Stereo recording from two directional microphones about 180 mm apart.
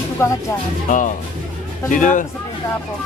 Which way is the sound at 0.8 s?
45° left (ahead or behind).